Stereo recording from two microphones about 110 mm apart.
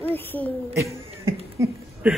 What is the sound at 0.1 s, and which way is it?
Speech, 20° left (ahead or behind).